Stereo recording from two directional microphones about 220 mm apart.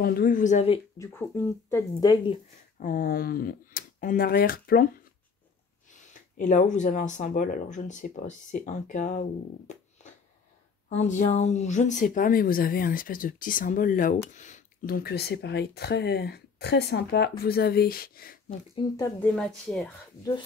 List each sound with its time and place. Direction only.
0.0 s speech: 40° left (ahead or behind)
0.9 s speech: 10° left (ahead or behind)
2.8 s speech: 40° left (ahead or behind)
5.9 s speech: 35° left (ahead or behind)
18.8 s speech: 15° left (ahead or behind)
19.3 s speech: centre (ahead or behind)